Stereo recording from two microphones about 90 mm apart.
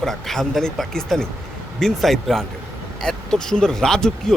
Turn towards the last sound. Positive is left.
turn(degrees=5)  # may be behind; listen again after turning